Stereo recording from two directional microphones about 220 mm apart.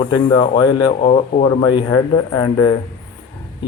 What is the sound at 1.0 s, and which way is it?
Speech, 30° left (ahead or behind).